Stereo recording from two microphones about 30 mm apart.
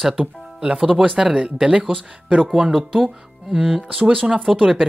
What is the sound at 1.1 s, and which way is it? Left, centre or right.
Speech, right.